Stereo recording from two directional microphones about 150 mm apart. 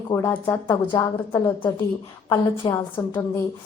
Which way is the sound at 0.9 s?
30° left (ahead or behind).